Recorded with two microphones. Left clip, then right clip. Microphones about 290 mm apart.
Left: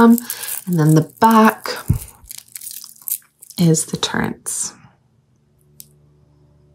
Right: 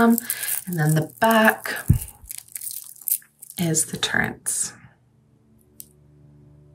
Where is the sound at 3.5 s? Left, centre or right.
Centre.